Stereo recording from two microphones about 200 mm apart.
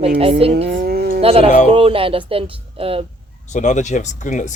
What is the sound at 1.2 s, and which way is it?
A woman's voice, 30° right (ahead or behind).